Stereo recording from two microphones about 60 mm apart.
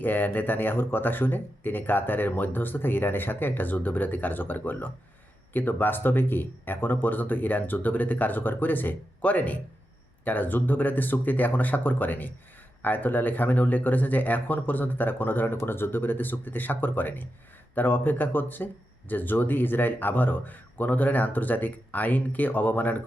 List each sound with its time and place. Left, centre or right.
0.0 s speech: left